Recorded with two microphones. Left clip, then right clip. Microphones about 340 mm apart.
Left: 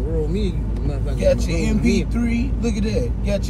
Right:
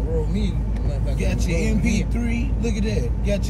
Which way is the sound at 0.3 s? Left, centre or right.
Centre.